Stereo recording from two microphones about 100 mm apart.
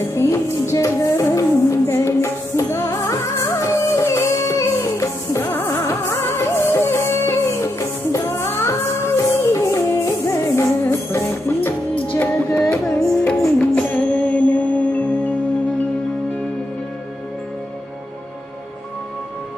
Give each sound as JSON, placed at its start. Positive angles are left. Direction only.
{"t": 0.1, "sound": "music", "side_deg": 30}